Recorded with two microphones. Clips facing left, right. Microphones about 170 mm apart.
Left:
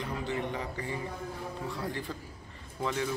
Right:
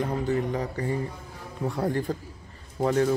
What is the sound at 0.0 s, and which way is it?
A man's voice, 45° right (ahead or behind).